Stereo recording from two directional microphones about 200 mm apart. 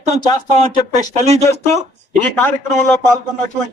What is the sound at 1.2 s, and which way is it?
Speech, 35° right (ahead or behind).